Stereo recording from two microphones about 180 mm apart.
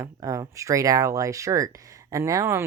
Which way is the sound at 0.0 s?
20° right (ahead or behind).